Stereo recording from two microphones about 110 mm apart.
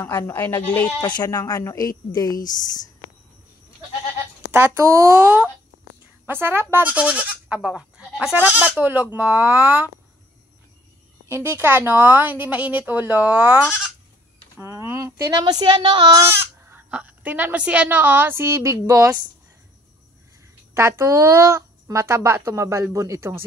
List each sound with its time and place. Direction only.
0.1 s speech: 20° left (ahead or behind)
1.0 s speech: 40° left (ahead or behind)
4.5 s speech: 25° right (ahead or behind); by 8.4 s 5° right (ahead or behind)
8.4 s speech: 15° right (ahead or behind)
11.2 s speech: 20° right (ahead or behind)
14.6 s speech: 25° right (ahead or behind); by 16.2 s 45° right (ahead or behind)
16.3 s speech: 15° right (ahead or behind); by 19.1 s 30° right (ahead or behind)
20.7 s speech: 25° right (ahead or behind)